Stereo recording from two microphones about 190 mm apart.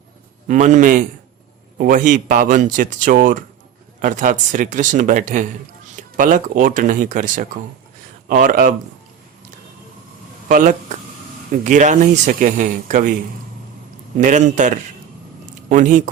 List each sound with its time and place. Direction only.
0.4 s a man's voice: 40° right (ahead or behind)
10.5 s speech: 45° right (ahead or behind)
14.2 s a man's voice: 40° right (ahead or behind)
15.7 s a man's voice: 40° right (ahead or behind)